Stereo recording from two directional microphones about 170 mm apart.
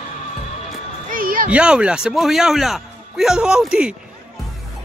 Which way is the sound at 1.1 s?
55° right (ahead or behind).